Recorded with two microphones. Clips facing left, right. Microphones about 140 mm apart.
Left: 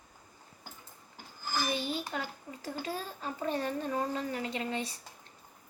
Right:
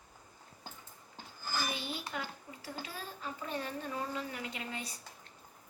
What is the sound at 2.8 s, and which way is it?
A child's voice, 40° left (ahead or behind).